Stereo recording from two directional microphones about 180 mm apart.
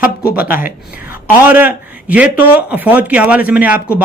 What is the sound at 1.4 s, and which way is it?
Speech, 10° right (ahead or behind).